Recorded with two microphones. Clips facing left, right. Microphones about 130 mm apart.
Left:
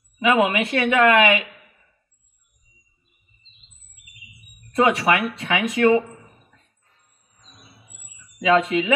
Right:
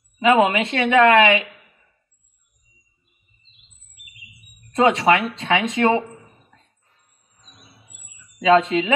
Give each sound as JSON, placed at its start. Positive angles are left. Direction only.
{"t": 0.2, "sound": "a woman's voice", "side_deg": -30}
{"t": 4.7, "sound": "a woman's voice", "side_deg": -25}
{"t": 8.4, "sound": "a woman's voice", "side_deg": -30}